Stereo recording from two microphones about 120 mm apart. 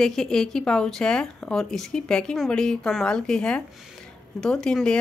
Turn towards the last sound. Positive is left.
turn(degrees=5)  # may be behind; listen again after turning